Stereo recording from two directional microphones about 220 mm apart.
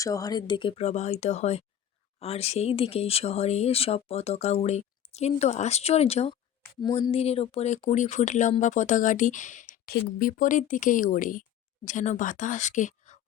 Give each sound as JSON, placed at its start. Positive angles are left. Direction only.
{"t": 0.0, "sound": "speech", "side_deg": 15}